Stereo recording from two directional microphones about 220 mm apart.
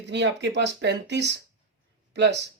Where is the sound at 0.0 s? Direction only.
50° right (ahead or behind).